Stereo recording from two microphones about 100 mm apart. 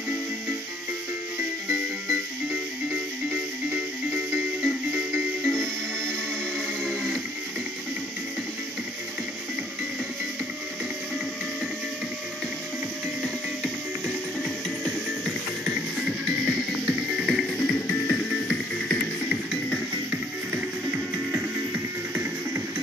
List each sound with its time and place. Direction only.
2.0 s music: 10° right (ahead or behind)
5.5 s music: 5° left (ahead or behind)
13.2 s music: 5° left (ahead or behind)
16.4 s music: 10° right (ahead or behind)
20.9 s music: 20° right (ahead or behind)